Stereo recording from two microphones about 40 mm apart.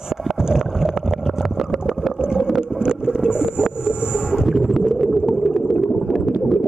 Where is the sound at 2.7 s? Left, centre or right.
Centre.